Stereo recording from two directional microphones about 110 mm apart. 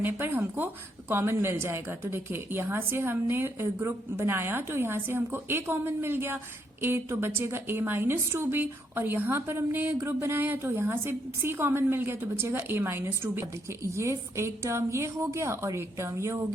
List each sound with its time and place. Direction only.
0.0 s a woman's voice: 20° right (ahead or behind)